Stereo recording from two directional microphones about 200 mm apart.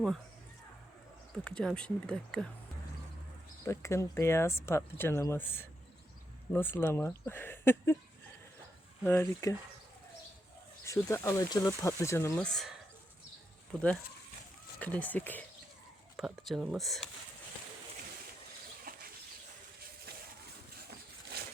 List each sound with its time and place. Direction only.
1.3 s speech: 5° left (ahead or behind)
3.6 s speech: 15° left (ahead or behind)
9.0 s speech: 10° left (ahead or behind)
10.8 s speech: 15° left (ahead or behind)
14.8 s speech: 10° left (ahead or behind)
18.9 s bird: 45° right (ahead or behind)
20.1 s a sound: 50° right (ahead or behind)
21.3 s a sound: 50° right (ahead or behind)